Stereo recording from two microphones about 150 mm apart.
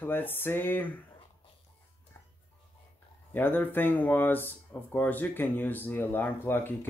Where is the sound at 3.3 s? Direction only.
10° left (ahead or behind).